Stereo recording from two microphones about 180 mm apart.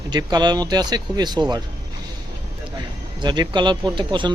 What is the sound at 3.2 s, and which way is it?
Speech, 25° right (ahead or behind).